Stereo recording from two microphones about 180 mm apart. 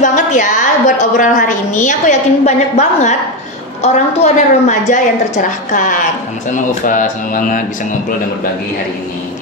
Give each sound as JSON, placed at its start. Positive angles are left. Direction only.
{"t": 0.0, "sound": "a woman's voice", "side_deg": 45}
{"t": 6.5, "sound": "speech", "side_deg": 45}